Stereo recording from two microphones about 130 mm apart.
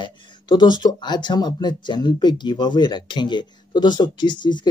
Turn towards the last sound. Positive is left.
turn(degrees=35)  # may be behind; listen again after turning